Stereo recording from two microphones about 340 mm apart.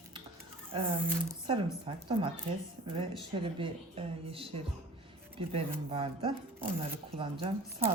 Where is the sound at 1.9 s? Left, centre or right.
Centre.